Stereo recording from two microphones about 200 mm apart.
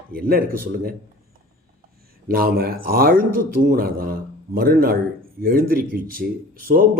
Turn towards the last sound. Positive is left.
turn(degrees=-45)  # may be behind; listen again after turning